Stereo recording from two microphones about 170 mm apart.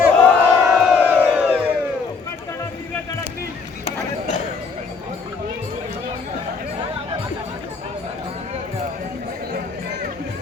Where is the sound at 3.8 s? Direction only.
45° left (ahead or behind).